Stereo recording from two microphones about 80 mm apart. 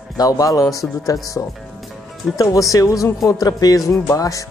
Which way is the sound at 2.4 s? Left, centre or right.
Left.